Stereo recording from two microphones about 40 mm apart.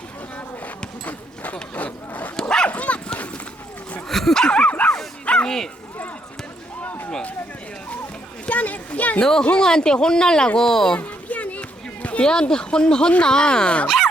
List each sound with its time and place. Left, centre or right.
1.7 s a sound: left
2.4 s dog: centre
2.6 s bow-wow: left
4.1 s dog: centre
4.4 s dog: left
8.4 s a sound: left
9.2 s speech: left
10.9 s a sound: left
12.2 s speech: centre
13.8 s dog: centre